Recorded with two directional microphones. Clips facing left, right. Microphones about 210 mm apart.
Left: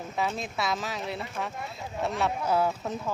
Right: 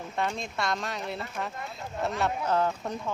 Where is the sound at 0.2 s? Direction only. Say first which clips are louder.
Left 1 dB; 5° left (ahead or behind).